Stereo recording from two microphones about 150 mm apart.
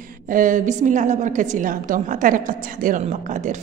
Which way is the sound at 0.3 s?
60° right (ahead or behind).